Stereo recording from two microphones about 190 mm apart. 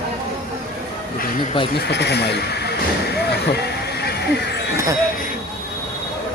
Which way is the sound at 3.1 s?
60° left (ahead or behind).